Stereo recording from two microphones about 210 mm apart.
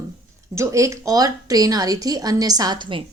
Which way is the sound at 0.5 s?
15° right (ahead or behind).